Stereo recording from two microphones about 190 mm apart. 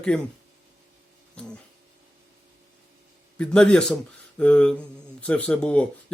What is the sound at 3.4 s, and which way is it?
Speech, 5° left (ahead or behind).